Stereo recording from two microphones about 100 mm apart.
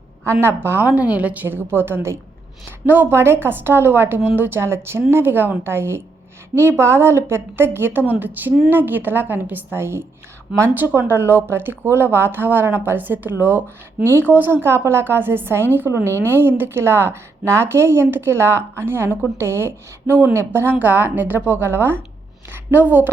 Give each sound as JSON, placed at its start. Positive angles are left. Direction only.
{"t": 0.3, "sound": "a woman's voice", "side_deg": -25}